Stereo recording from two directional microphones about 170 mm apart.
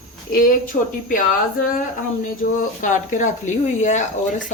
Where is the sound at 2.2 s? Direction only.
50° left (ahead or behind).